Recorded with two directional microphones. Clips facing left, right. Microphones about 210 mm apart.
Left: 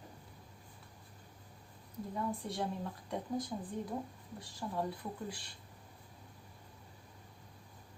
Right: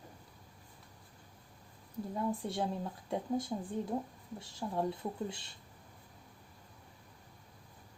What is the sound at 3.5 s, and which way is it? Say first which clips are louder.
Speech: right 3 dB; 20° right (ahead or behind).